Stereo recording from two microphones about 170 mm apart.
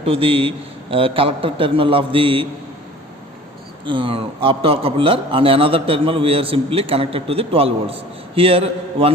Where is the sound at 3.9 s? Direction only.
30° right (ahead or behind).